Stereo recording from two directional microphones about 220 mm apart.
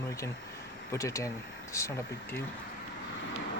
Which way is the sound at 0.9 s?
15° left (ahead or behind).